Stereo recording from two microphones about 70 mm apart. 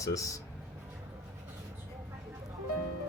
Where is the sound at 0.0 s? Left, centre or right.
Left.